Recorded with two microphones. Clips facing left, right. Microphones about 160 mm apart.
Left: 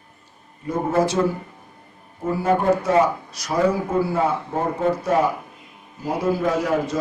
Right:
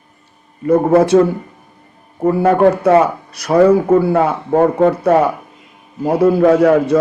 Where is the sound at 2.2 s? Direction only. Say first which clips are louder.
Right 8 dB; 60° right (ahead or behind).